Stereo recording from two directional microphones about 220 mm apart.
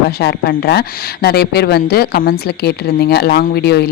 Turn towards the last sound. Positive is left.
turn(degrees=45)  # may be behind; listen again after turning